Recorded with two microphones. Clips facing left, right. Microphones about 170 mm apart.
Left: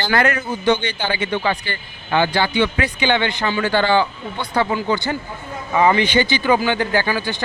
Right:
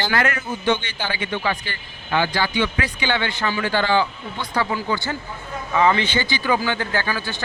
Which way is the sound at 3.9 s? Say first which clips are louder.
Left 3 dB; 60° left (ahead or behind).